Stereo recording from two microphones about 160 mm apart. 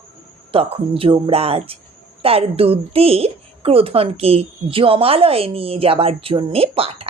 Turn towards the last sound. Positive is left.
turn(degrees=-35)  # may be behind; listen again after turning